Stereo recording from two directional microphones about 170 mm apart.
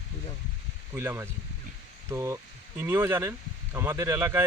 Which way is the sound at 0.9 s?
15° right (ahead or behind).